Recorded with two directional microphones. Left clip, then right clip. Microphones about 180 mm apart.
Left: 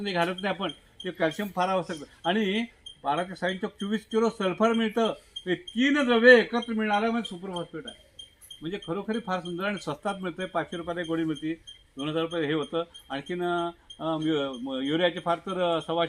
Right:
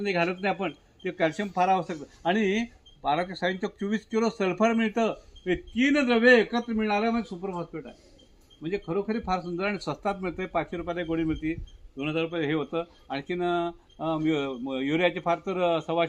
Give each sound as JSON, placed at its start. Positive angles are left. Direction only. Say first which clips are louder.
{"t": 0.1, "sound": "speech", "louder": "right 1 dB", "side_deg": -40}
{"t": 1.0, "sound": "speech", "louder": "right 1 dB", "side_deg": -20}